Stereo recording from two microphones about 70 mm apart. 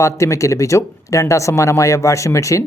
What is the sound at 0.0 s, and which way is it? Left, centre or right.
Speech, left.